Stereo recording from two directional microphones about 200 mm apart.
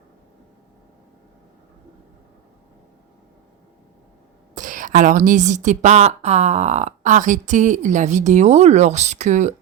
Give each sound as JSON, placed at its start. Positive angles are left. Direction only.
{"t": 4.5, "sound": "speech", "side_deg": -40}